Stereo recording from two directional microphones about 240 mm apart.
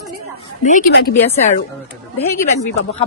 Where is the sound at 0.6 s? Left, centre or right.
Left.